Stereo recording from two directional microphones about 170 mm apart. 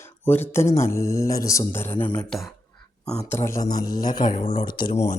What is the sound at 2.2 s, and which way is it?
Speech, centre (ahead or behind).